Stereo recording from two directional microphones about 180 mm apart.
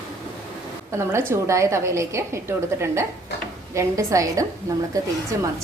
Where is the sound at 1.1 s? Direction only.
15° right (ahead or behind).